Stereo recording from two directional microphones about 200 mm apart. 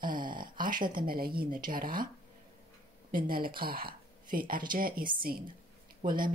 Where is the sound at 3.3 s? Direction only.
45° right (ahead or behind).